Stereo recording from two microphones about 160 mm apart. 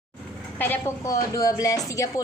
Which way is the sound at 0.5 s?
10° left (ahead or behind).